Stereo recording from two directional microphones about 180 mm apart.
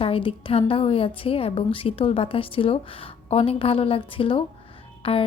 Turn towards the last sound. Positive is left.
turn(degrees=30)  # may be behind; listen again after turning